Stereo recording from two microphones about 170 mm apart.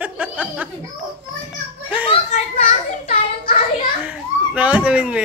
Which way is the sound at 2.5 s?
55° left (ahead or behind).